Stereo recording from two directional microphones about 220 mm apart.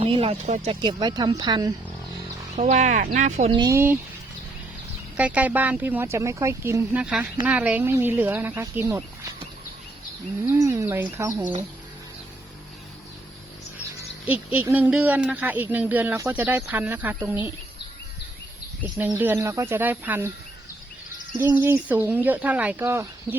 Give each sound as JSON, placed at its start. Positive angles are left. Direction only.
{"t": 0.0, "sound": "speech", "side_deg": -25}
{"t": 2.6, "sound": "speech", "side_deg": -30}
{"t": 3.6, "sound": "speech", "side_deg": -10}
{"t": 5.1, "sound": "speech", "side_deg": -5}
{"t": 10.4, "sound": "speech", "side_deg": -15}
{"t": 14.5, "sound": "speech", "side_deg": -10}
{"t": 18.8, "sound": "speech", "side_deg": -10}
{"t": 21.3, "sound": "speech", "side_deg": -10}